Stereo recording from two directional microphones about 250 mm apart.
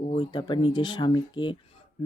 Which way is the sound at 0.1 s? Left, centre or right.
Centre.